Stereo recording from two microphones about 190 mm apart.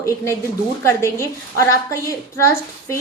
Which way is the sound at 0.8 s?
15° left (ahead or behind).